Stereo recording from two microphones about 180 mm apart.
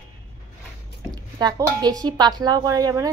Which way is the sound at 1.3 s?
25° right (ahead or behind).